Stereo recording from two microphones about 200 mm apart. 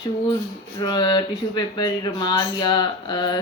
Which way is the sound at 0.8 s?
20° left (ahead or behind).